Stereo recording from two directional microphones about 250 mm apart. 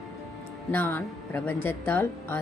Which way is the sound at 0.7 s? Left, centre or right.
Centre.